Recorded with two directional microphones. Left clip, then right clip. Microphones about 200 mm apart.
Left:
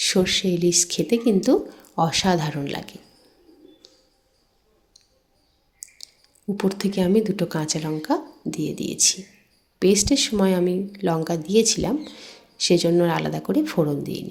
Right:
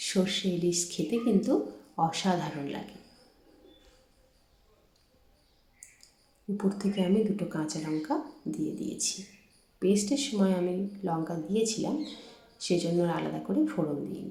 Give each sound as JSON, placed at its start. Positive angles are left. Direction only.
{"t": 0.0, "sound": "speech", "side_deg": 45}
{"t": 3.8, "sound": "mouse", "side_deg": 40}
{"t": 6.6, "sound": "speech", "side_deg": 45}